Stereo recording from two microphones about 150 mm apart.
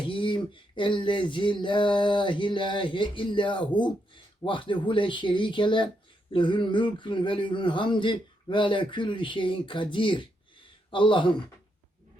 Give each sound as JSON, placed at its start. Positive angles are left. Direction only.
{"t": 0.1, "sound": "speech", "side_deg": 35}